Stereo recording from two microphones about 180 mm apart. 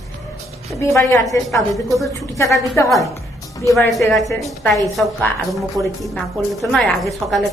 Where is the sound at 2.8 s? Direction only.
15° left (ahead or behind).